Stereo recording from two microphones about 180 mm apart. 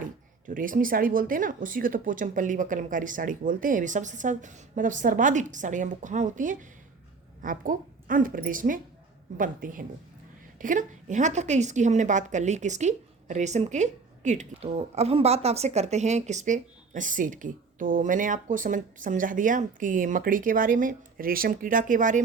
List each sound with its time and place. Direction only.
0.4 s a woman's voice: 50° right (ahead or behind)